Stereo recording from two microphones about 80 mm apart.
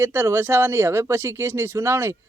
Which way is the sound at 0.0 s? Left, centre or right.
Right.